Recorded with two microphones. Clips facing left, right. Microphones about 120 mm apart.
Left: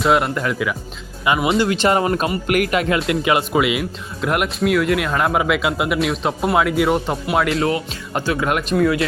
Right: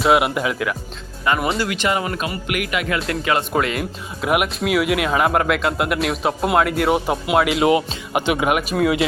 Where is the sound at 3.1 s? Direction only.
15° left (ahead or behind).